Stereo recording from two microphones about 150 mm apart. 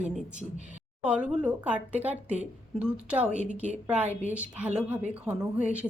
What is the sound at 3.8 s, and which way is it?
A woman's voice, 10° right (ahead or behind).